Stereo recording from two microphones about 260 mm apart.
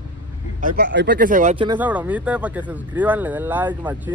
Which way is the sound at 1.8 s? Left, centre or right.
Centre.